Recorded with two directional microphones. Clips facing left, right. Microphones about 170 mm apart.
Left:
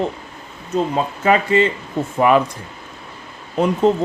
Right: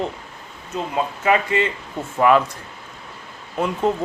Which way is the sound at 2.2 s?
15° left (ahead or behind).